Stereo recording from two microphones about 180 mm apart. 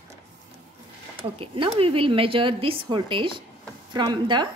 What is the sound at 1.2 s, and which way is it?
A woman's voice, 30° right (ahead or behind).